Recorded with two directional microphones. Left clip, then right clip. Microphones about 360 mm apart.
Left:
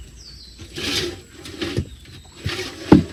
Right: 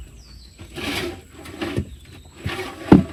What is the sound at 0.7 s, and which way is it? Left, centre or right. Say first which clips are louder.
Wood: left 3 dB; centre.